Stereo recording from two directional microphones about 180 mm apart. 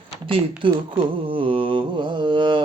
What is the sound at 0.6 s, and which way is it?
Mantra, 25° right (ahead or behind).